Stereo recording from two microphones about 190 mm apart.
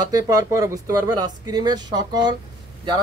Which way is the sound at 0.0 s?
20° right (ahead or behind).